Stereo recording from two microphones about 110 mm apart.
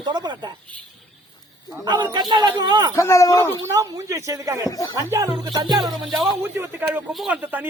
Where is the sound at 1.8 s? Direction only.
40° right (ahead or behind).